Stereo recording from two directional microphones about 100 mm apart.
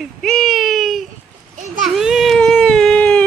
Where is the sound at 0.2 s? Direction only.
Centre (ahead or behind).